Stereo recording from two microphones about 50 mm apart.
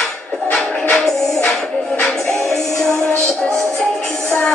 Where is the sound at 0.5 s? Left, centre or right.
Centre.